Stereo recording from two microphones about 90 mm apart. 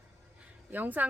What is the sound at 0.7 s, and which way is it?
Speech, 20° right (ahead or behind).